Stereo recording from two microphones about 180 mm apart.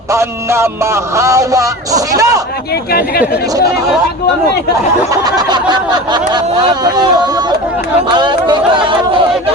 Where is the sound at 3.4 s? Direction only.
20° right (ahead or behind).